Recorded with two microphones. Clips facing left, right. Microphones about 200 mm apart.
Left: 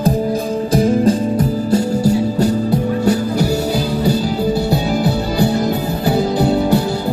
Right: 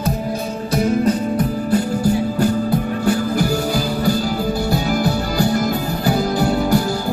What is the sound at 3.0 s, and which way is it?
Music, 25° left (ahead or behind).